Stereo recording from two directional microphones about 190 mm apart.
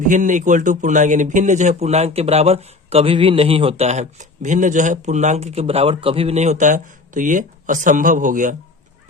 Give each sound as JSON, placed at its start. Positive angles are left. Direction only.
{"t": 0.1, "sound": "a man's voice", "side_deg": -40}